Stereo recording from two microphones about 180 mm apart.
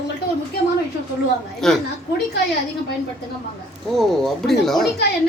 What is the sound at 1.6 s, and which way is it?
Speech, centre (ahead or behind).